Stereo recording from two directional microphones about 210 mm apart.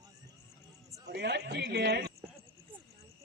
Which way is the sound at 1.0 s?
55° right (ahead or behind).